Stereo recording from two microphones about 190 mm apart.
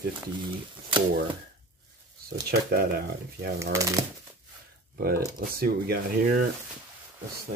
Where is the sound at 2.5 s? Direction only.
55° right (ahead or behind).